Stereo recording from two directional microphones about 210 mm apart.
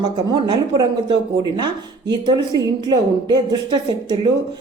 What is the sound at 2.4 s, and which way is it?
Speech, 20° right (ahead or behind).